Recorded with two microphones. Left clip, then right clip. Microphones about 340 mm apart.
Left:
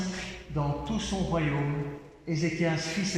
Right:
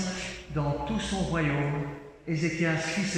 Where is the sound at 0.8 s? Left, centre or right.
Centre.